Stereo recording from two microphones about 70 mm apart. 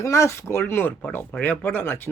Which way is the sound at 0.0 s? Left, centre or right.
Left.